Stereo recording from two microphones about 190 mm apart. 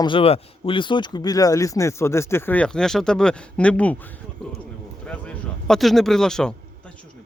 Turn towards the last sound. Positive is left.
turn(degrees=5)  # may be behind; listen again after turning